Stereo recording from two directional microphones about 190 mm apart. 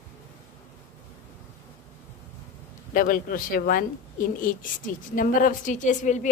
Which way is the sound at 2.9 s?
50° left (ahead or behind).